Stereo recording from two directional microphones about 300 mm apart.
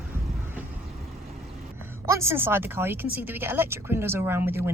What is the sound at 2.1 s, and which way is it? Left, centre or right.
Speech, centre.